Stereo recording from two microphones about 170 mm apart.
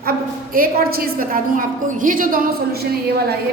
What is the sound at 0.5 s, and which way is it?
A woman's voice, 60° right (ahead or behind).